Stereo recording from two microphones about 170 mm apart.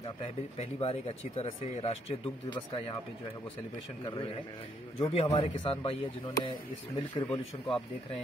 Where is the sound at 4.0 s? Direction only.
30° left (ahead or behind).